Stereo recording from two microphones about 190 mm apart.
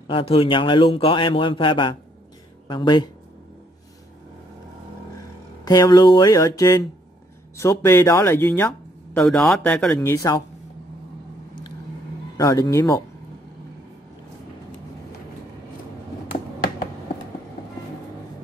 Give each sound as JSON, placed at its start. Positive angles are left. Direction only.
{"t": 0.0, "sound": "a man's voice", "side_deg": 30}
{"t": 5.7, "sound": "a man's voice", "side_deg": 20}
{"t": 9.9, "sound": "speech", "side_deg": 15}
{"t": 12.4, "sound": "speech", "side_deg": 20}